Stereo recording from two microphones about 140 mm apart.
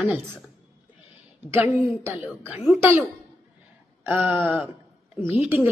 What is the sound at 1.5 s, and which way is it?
A woman's voice, 15° right (ahead or behind).